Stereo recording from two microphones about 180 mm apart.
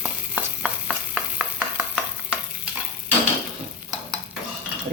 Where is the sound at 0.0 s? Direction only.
5° right (ahead or behind).